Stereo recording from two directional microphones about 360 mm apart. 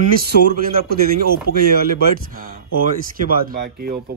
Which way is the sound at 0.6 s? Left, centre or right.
Right.